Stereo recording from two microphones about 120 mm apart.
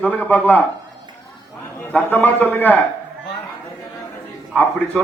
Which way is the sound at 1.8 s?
15° left (ahead or behind).